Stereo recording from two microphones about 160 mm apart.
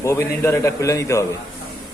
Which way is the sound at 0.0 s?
15° left (ahead or behind).